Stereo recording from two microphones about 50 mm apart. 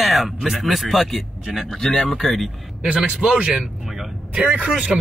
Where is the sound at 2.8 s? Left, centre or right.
Right.